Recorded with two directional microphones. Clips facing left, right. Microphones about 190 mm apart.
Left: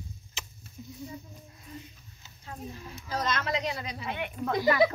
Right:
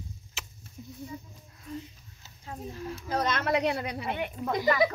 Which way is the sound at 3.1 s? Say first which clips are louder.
Right 3 dB; 55° right (ahead or behind).